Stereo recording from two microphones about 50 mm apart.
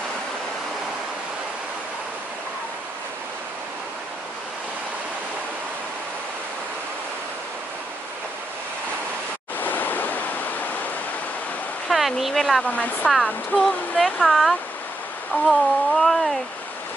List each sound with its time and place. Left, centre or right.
9.6 s waves: left
11.9 s speech: centre
12.6 s speech: left
13.6 s speech: centre